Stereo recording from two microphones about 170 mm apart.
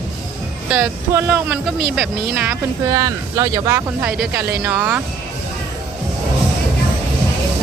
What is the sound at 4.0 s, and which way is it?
Speech, 5° right (ahead or behind).